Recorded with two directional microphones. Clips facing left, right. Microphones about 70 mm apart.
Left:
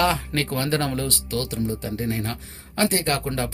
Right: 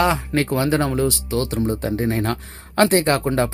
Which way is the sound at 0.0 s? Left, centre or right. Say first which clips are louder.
Right 3 dB; right.